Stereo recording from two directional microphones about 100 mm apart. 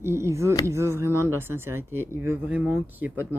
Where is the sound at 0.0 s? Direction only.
25° right (ahead or behind).